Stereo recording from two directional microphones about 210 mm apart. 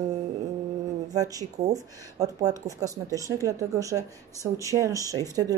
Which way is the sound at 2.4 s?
15° right (ahead or behind).